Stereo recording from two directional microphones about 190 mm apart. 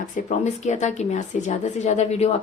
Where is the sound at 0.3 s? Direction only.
40° left (ahead or behind).